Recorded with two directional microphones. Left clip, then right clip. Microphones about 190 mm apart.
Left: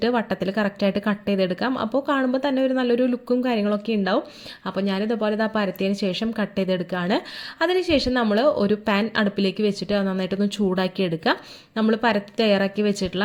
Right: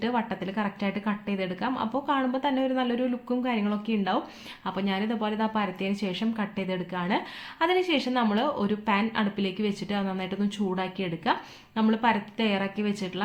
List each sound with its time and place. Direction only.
0.0 s a woman's voice: 35° left (ahead or behind)